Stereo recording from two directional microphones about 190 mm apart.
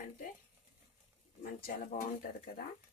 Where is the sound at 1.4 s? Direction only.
50° left (ahead or behind).